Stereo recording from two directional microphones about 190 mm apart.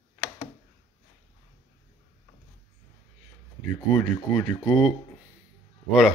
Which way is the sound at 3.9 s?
Centre (ahead or behind).